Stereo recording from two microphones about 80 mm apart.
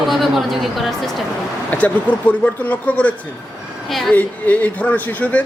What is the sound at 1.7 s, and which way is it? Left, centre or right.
Speech, centre.